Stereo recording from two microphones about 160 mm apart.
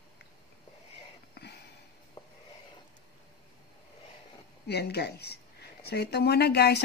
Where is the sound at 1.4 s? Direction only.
90° left.